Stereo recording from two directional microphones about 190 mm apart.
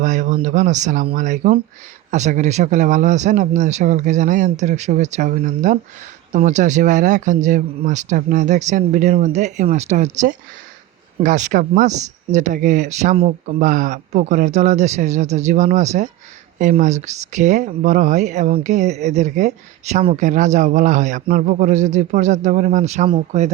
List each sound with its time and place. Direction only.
0.0 s speech: 40° right (ahead or behind)